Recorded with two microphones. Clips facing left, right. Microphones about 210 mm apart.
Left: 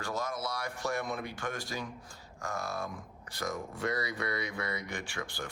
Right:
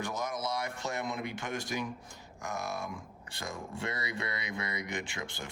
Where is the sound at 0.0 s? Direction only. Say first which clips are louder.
Even; 20° right (ahead or behind).